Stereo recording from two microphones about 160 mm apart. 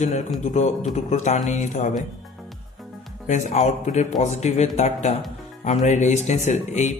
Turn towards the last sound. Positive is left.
turn(degrees=45)  # may be behind; listen again after turning